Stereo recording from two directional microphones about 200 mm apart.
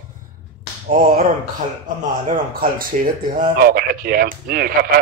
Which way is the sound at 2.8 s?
45° right (ahead or behind).